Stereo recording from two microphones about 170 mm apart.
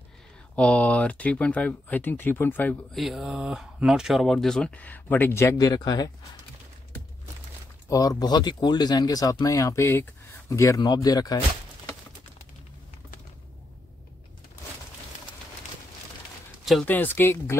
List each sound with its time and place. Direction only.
0.6 s speech: 10° left (ahead or behind)
3.0 s speech: centre (ahead or behind); by 6.0 s 25° left (ahead or behind)
7.9 s speech: 20° left (ahead or behind)
16.8 s speech: 10° left (ahead or behind)